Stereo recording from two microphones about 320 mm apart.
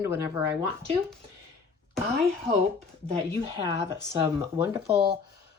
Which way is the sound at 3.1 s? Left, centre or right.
Centre.